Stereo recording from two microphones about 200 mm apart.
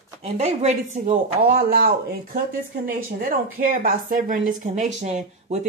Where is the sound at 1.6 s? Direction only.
50° right (ahead or behind).